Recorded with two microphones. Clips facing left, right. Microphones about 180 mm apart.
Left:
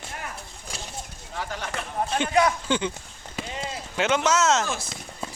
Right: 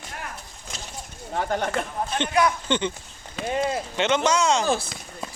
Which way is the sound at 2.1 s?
5° left (ahead or behind).